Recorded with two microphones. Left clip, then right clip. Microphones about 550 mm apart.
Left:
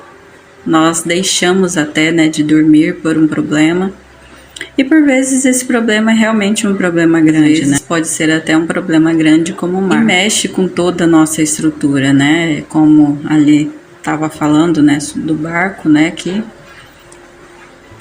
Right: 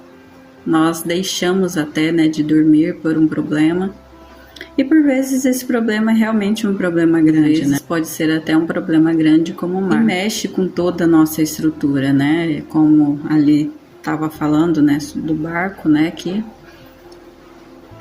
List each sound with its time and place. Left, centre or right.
0.7 s a woman's voice: right